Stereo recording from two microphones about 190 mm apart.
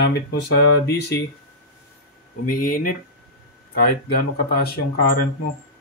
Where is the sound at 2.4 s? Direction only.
50° left (ahead or behind).